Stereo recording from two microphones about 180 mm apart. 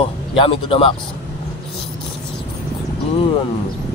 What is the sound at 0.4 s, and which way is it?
Speech, 30° left (ahead or behind).